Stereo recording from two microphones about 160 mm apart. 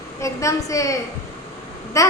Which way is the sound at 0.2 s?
20° left (ahead or behind).